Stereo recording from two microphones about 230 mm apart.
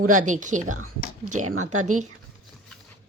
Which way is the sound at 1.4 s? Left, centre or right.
Right.